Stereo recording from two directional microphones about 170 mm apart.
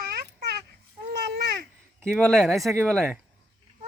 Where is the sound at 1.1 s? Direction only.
90° right.